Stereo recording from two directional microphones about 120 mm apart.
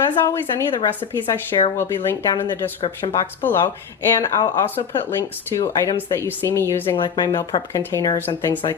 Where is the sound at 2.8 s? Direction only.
35° left (ahead or behind).